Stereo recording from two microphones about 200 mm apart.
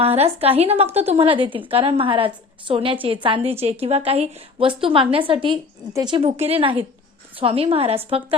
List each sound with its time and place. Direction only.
0.0 s a woman's voice: 30° right (ahead or behind)